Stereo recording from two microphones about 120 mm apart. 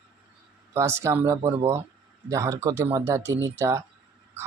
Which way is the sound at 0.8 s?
25° right (ahead or behind).